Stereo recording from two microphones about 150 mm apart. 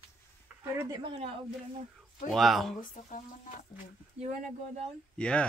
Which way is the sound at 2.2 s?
Centre (ahead or behind).